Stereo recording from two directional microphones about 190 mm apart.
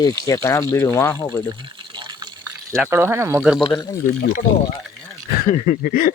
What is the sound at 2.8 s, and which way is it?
Speech, 10° right (ahead or behind).